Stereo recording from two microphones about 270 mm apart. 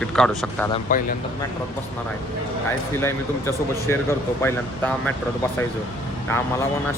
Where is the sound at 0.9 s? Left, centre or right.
Left.